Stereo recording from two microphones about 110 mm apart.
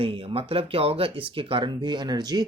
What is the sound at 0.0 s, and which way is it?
Speech, 55° right (ahead or behind).